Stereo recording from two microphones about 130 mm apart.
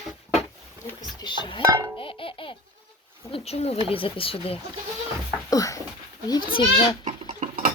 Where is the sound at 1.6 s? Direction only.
25° right (ahead or behind).